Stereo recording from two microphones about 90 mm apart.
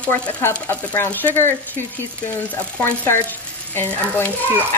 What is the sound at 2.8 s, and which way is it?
Speech, 25° left (ahead or behind).